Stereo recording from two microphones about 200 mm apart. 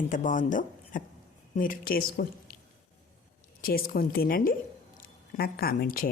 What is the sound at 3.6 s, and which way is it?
Speech, 45° left (ahead or behind).